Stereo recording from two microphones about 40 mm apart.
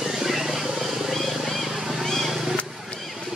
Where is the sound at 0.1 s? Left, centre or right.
Centre.